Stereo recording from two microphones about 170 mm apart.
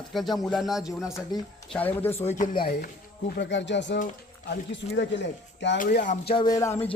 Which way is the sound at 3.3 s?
90° left.